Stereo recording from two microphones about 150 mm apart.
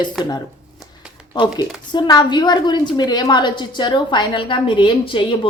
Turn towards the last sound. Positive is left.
turn(degrees=35)  # may be behind; listen again after turning